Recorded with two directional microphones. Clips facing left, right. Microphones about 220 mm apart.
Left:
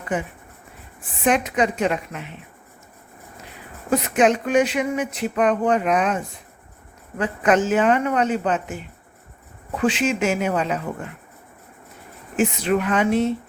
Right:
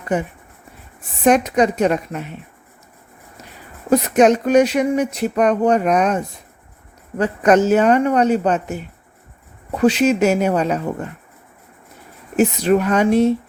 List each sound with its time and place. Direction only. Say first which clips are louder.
1.2 s speech: right 5 dB; 40° right (ahead or behind)
3.8 s speech: right 5 dB; 40° right (ahead or behind)
12.4 s speech: right 5 dB; 40° right (ahead or behind)